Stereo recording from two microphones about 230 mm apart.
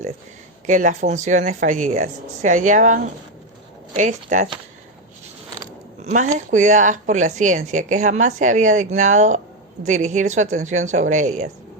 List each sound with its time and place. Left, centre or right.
0.7 s a woman's voice: right
6.0 s a woman's voice: right